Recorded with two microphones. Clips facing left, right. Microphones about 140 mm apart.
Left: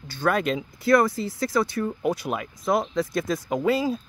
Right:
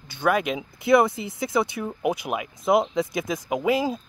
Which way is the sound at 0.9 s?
20° right (ahead or behind).